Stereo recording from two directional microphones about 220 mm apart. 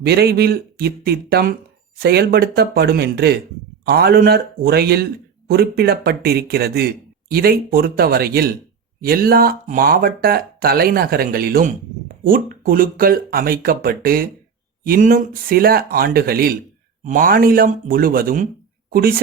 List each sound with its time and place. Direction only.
0.0 s speech: 45° right (ahead or behind)